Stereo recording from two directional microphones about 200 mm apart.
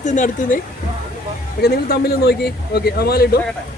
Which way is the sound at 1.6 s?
50° left (ahead or behind).